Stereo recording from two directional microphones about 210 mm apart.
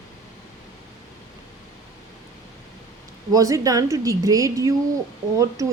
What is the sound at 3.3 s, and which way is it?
Speech, 15° right (ahead or behind).